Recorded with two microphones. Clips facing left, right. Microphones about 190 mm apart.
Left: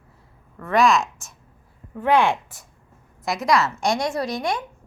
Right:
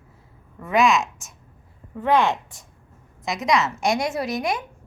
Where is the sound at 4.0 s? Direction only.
25° right (ahead or behind).